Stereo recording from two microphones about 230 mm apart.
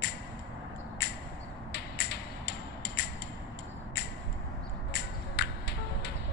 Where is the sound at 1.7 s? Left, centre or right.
Left.